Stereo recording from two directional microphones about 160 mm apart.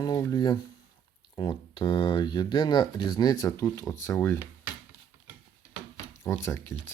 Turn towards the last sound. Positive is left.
turn(degrees=15)  # may be behind; listen again after turning